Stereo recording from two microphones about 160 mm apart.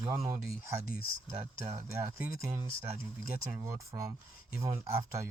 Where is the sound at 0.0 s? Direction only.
20° right (ahead or behind).